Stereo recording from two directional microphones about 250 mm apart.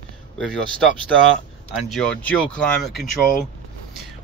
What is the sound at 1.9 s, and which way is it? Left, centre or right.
Speech, centre.